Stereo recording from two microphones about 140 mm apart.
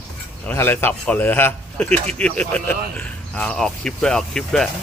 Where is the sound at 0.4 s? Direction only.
15° left (ahead or behind).